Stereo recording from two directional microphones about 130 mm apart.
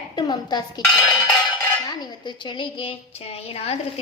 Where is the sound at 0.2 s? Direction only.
35° left (ahead or behind).